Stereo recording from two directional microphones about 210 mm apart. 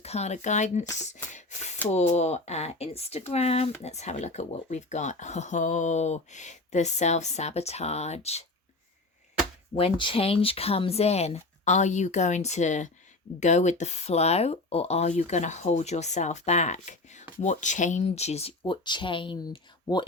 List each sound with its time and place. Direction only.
0.0 s speech: 30° left (ahead or behind)
1.3 s a sound: 35° left (ahead or behind)
1.9 s speech: 30° left (ahead or behind)
9.7 s speech: 25° left (ahead or behind)